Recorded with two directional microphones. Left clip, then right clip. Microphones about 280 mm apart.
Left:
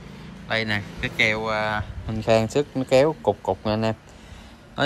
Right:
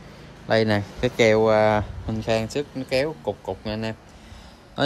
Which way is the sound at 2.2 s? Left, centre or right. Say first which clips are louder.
Left 5 dB; centre.